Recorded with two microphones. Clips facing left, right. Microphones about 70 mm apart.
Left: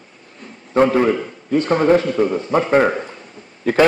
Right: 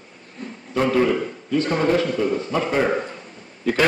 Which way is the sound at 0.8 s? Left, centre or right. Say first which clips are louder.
Left 4 dB; left.